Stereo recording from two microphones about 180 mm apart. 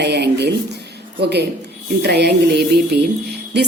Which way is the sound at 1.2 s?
65° right (ahead or behind).